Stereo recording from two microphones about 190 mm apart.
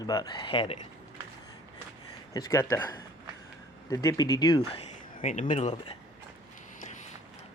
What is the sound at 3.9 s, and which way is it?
Speech, 20° left (ahead or behind).